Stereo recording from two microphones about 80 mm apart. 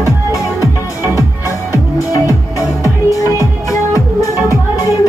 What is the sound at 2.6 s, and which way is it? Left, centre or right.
Music, left.